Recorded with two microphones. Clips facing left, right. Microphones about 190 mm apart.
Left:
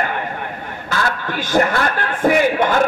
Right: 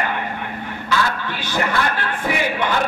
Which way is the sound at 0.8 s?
50° left (ahead or behind).